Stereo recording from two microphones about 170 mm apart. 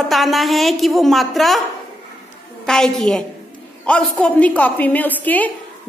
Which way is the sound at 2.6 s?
5° left (ahead or behind).